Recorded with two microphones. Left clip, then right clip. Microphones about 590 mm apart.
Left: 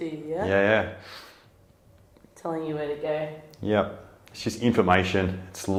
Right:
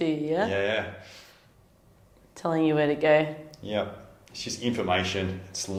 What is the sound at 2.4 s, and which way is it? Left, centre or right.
Speech, right.